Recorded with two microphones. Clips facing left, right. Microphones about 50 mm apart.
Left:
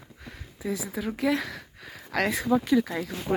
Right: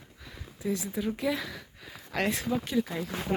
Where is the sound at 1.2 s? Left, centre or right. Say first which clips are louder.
Left 4 dB; left.